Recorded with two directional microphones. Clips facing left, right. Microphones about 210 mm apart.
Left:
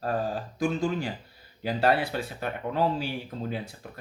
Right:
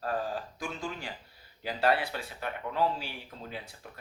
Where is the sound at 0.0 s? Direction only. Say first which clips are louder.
Left 4 dB; 40° left (ahead or behind).